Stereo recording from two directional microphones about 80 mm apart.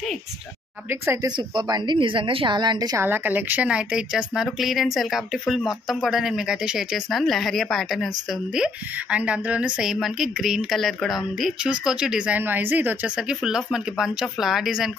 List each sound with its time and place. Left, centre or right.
1.5 s a woman's voice: right
3.0 s speech: right; by 8.1 s centre
9.1 s a woman's voice: centre
12.4 s a woman's voice: right
13.3 s a woman's voice: centre